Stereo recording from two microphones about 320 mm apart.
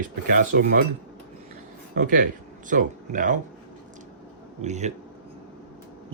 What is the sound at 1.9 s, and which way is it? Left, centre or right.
Speech, right.